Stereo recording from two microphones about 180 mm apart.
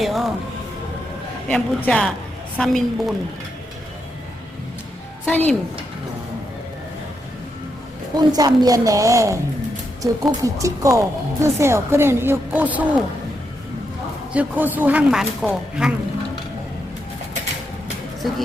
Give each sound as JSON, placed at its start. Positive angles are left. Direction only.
{"t": 0.0, "sound": "music", "side_deg": 0}
{"t": 1.5, "sound": "a man's voice", "side_deg": 5}
{"t": 5.2, "sound": "speech", "side_deg": 10}
{"t": 8.1, "sound": "a woman's voice", "side_deg": -20}
{"t": 14.3, "sound": "a woman's voice", "side_deg": -10}